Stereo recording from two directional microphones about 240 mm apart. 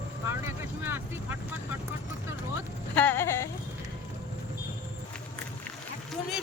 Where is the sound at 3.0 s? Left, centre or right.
Centre.